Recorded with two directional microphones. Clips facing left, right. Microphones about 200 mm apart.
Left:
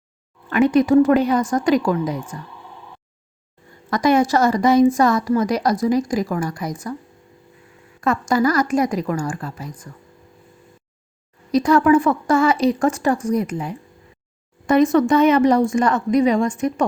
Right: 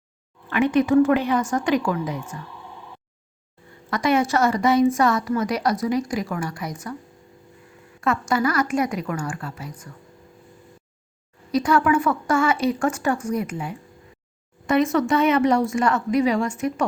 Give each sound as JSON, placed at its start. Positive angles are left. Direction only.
{"t": 0.5, "sound": "speech", "side_deg": 40}
{"t": 3.8, "sound": "speech", "side_deg": 40}
{"t": 8.0, "sound": "speech", "side_deg": 35}
{"t": 11.5, "sound": "speech", "side_deg": 35}